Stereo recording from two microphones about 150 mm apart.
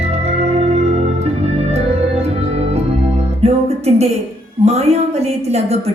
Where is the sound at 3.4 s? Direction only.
45° right (ahead or behind).